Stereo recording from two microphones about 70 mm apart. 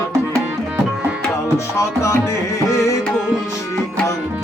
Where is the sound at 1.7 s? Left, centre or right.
Left.